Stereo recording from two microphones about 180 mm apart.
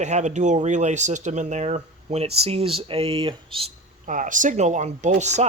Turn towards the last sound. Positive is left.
turn(degrees=-40)  # may be behind; listen again after turning